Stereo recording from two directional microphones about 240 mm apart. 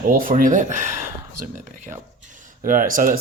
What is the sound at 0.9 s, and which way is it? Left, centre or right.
Speech, right.